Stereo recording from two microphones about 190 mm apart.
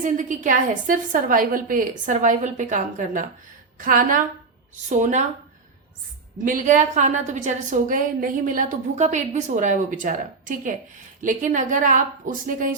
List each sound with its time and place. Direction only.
0.0 s a woman's voice: 45° right (ahead or behind)
6.4 s a woman's voice: 40° right (ahead or behind)